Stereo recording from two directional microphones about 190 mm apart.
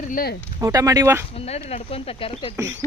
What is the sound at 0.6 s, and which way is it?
Speech, 20° right (ahead or behind).